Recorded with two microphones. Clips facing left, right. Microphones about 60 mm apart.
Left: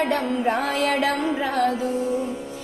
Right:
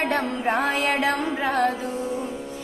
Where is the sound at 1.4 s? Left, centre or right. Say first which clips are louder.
Right 2 dB; right.